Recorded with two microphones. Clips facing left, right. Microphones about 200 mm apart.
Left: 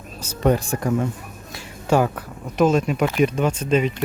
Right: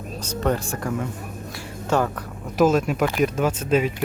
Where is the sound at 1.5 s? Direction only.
10° left (ahead or behind).